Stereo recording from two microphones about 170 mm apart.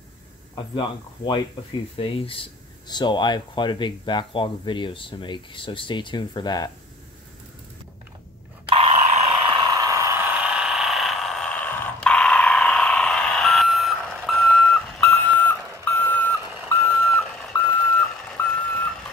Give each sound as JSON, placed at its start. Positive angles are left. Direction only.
{"t": 0.6, "sound": "speech", "side_deg": 30}
{"t": 8.6, "sound": "a sound", "side_deg": -35}
{"t": 14.4, "sound": "alarm clock", "side_deg": 5}
{"t": 18.4, "sound": "reversing beeps", "side_deg": 15}